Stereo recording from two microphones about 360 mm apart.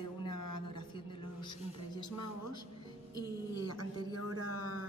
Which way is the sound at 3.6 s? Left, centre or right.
Left.